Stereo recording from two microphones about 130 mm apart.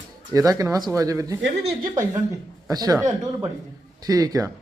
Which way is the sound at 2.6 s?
30° right (ahead or behind).